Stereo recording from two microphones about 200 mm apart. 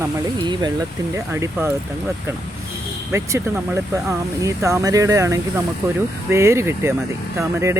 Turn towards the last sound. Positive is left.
turn(degrees=-15)  # may be behind; listen again after turning